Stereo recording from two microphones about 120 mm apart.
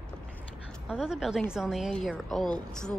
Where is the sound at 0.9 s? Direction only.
5° right (ahead or behind).